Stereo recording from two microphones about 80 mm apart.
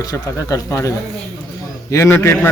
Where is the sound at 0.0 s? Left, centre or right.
Left.